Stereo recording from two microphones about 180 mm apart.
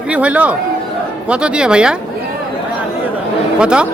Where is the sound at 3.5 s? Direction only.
5° right (ahead or behind).